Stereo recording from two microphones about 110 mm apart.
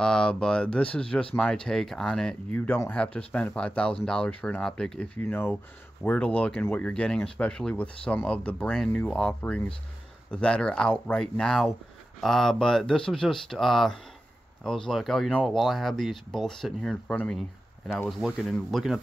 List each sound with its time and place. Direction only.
0.0 s speech: 5° left (ahead or behind)
5.2 s speech: 20° left (ahead or behind)
18.2 s speech: centre (ahead or behind)